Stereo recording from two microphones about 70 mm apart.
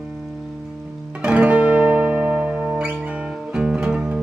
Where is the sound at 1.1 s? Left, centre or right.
Centre.